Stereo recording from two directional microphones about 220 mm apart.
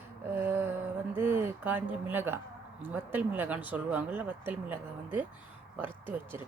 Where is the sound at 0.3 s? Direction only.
10° right (ahead or behind).